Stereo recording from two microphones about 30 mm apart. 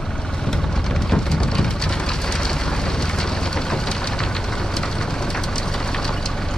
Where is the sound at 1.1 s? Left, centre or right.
Left.